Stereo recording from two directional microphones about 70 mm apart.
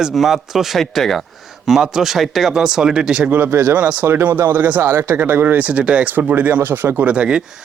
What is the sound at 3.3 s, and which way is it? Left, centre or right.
Speech, right.